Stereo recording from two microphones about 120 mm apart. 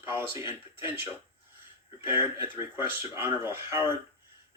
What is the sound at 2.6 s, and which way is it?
Speech, 20° right (ahead or behind).